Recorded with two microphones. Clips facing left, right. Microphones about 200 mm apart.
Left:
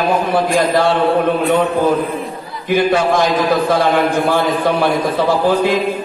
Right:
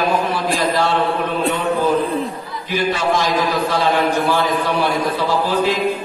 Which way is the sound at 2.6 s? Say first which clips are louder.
Left 6 dB; 55° left (ahead or behind).